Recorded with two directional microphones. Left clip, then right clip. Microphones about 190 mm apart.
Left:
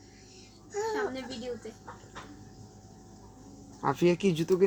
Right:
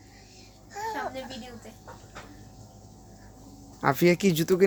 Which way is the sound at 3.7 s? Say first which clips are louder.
Right 4 dB; 45° right (ahead or behind).